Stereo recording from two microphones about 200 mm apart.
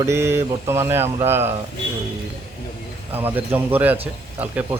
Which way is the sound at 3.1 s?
10° right (ahead or behind).